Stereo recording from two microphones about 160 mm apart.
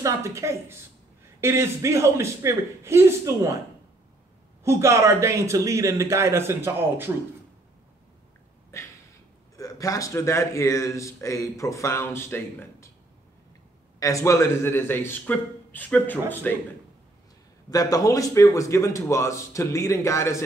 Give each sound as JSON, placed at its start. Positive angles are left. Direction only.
{"t": 0.0, "sound": "speech", "side_deg": -20}
{"t": 4.6, "sound": "speech", "side_deg": -15}
{"t": 8.7, "sound": "a sound", "side_deg": 20}
{"t": 9.6, "sound": "speech", "side_deg": 20}
{"t": 13.9, "sound": "a man's voice", "side_deg": 20}
{"t": 17.6, "sound": "speech", "side_deg": 20}